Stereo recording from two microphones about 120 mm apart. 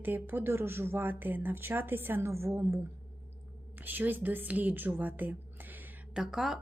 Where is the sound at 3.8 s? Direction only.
15° right (ahead or behind).